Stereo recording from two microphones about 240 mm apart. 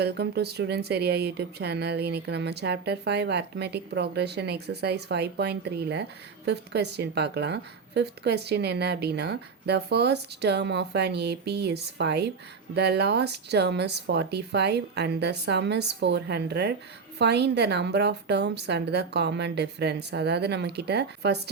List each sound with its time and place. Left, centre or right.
0.0 s speech: right